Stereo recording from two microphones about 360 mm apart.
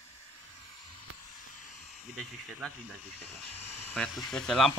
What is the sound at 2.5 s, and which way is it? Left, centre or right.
Speech, centre.